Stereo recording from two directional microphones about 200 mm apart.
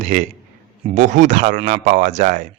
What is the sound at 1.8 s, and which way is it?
Speech, 40° right (ahead or behind).